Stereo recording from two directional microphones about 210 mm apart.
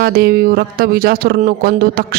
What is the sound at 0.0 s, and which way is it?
Speech, 45° right (ahead or behind).